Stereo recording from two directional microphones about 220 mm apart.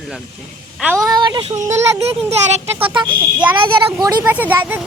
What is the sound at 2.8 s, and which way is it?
Speech, 20° right (ahead or behind).